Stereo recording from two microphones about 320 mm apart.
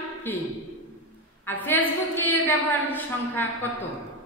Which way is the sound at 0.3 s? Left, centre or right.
Centre.